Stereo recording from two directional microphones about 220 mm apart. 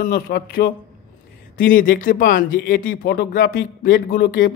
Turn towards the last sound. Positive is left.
turn(degrees=40)  # may be behind; listen again after turning